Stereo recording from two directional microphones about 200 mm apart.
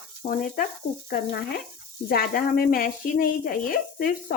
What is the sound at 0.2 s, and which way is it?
Speech, 40° left (ahead or behind).